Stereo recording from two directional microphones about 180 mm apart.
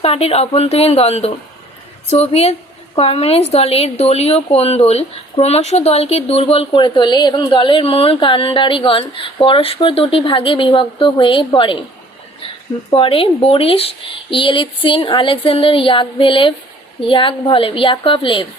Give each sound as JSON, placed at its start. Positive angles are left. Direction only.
{"t": 0.0, "sound": "a woman's voice", "side_deg": 35}
{"t": 12.9, "sound": "speech", "side_deg": 30}